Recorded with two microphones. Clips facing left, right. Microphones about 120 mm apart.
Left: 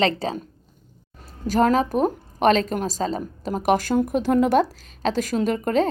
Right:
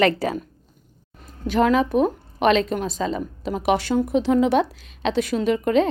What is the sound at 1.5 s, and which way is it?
A woman's voice, 40° left (ahead or behind).